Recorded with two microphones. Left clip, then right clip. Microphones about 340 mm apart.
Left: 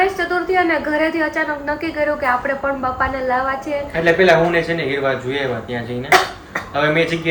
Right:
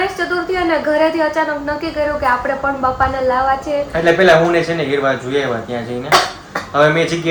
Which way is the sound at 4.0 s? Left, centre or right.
Centre.